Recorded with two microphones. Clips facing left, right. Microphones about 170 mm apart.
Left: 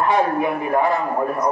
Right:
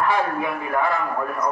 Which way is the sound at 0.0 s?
20° left (ahead or behind).